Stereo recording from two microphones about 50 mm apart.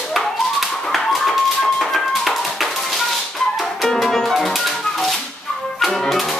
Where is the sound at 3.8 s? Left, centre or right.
Centre.